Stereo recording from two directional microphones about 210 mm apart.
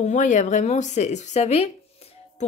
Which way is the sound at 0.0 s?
35° left (ahead or behind).